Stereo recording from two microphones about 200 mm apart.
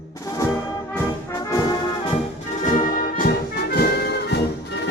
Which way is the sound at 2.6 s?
45° left (ahead or behind).